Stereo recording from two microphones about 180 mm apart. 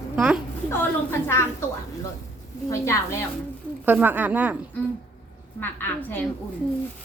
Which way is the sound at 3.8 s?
10° right (ahead or behind).